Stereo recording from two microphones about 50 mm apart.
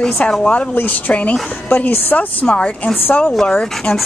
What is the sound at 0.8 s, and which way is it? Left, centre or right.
Speech, left.